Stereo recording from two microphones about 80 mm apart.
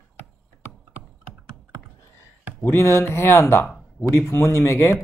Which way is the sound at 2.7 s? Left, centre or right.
Left.